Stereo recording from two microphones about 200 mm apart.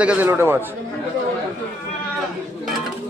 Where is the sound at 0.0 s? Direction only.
10° right (ahead or behind).